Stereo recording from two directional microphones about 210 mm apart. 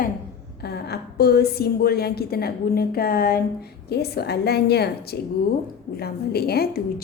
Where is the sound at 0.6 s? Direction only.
50° left (ahead or behind).